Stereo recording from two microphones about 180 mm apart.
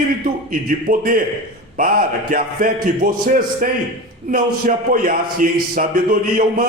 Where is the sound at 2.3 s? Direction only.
50° right (ahead or behind).